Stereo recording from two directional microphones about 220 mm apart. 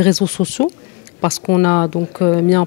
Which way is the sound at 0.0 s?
10° left (ahead or behind).